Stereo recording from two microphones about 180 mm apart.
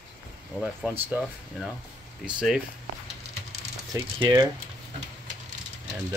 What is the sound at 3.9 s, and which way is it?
Speech, 15° right (ahead or behind).